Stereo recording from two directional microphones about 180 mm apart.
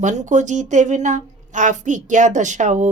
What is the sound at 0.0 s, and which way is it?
Speech, 40° right (ahead or behind).